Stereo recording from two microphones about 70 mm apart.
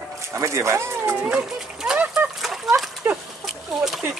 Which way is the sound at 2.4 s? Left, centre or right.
Centre.